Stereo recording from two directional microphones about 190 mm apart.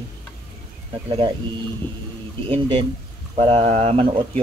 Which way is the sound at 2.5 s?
30° right (ahead or behind).